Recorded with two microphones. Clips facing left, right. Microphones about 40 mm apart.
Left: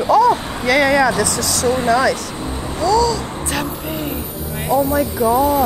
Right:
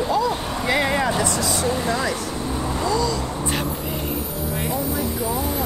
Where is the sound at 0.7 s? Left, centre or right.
Left.